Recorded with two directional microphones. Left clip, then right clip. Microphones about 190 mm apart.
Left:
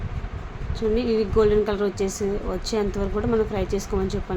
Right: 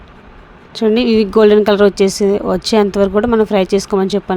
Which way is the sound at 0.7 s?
50° right (ahead or behind).